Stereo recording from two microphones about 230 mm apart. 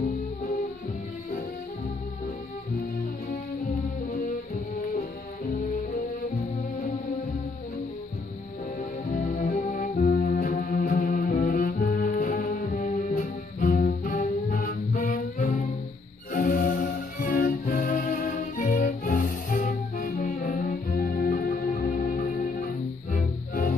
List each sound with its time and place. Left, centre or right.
9.1 s music: left